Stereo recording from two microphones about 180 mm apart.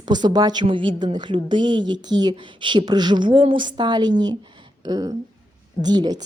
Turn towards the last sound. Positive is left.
turn(degrees=-20)  # may be behind; listen again after turning